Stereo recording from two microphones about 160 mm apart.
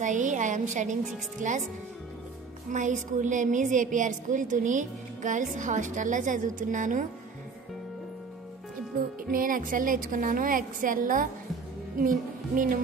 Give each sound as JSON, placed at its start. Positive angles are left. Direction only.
{"t": 0.0, "sound": "a woman's voice", "side_deg": -50}
{"t": 2.7, "sound": "a woman's voice", "side_deg": -50}
{"t": 9.3, "sound": "a woman's voice", "side_deg": -60}